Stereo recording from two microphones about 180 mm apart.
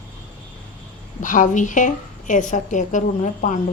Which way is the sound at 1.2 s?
45° left (ahead or behind).